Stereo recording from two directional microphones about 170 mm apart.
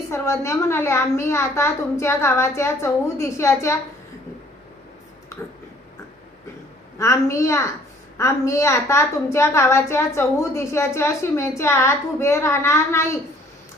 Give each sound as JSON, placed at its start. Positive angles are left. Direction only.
{"t": 0.1, "sound": "a woman's voice", "side_deg": 15}
{"t": 7.0, "sound": "a woman's voice", "side_deg": 15}